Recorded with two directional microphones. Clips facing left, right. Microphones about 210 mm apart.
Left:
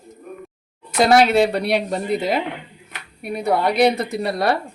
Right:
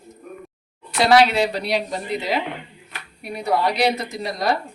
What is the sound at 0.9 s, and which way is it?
Speech, 45° left (ahead or behind).